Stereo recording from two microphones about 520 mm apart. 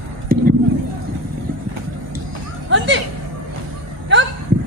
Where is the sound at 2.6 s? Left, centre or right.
Right.